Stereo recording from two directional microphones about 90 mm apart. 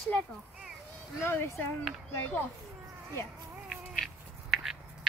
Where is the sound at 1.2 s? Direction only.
25° left (ahead or behind).